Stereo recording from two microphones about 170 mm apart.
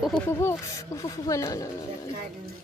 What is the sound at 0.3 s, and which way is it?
Speech, 15° left (ahead or behind).